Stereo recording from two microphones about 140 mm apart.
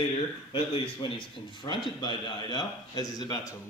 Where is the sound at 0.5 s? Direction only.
40° left (ahead or behind).